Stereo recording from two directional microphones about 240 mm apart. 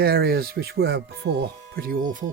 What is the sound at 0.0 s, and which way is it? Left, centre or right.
Speech, right.